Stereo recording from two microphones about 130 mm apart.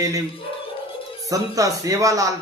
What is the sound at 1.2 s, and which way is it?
Speech, 25° right (ahead or behind).